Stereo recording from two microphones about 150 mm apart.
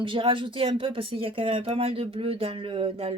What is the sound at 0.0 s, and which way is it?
Speech, 35° right (ahead or behind).